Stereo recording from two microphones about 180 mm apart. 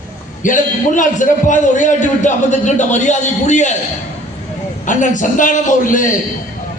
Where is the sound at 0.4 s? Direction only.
45° left (ahead or behind).